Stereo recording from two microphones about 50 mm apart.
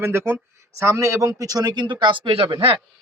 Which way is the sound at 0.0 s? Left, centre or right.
Right.